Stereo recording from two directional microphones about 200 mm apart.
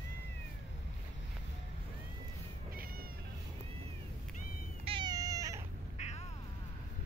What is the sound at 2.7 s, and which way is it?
Cat, 45° right (ahead or behind).